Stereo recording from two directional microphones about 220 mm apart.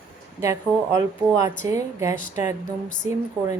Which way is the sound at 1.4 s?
15° right (ahead or behind).